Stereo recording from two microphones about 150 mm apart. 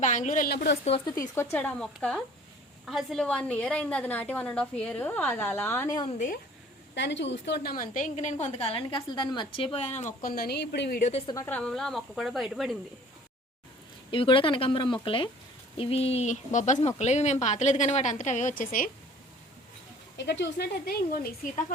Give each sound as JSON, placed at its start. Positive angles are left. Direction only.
{"t": 0.0, "sound": "a woman's voice", "side_deg": 55}
{"t": 1.0, "sound": "a woman's voice", "side_deg": 25}
{"t": 6.1, "sound": "a woman's voice", "side_deg": 65}
{"t": 7.5, "sound": "a woman's voice", "side_deg": 85}
{"t": 10.2, "sound": "speech", "side_deg": 90}
{"t": 11.4, "sound": "a woman's voice", "side_deg": 10}
{"t": 14.1, "sound": "a woman's voice", "side_deg": 35}
{"t": 20.2, "sound": "speech", "side_deg": 90}